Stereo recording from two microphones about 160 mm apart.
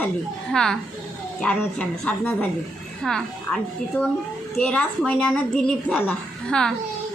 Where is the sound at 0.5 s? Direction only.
5° left (ahead or behind).